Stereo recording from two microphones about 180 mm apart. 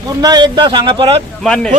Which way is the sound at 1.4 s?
5° left (ahead or behind).